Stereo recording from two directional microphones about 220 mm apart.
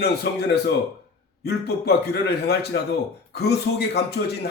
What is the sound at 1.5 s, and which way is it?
A man's voice, 45° left (ahead or behind).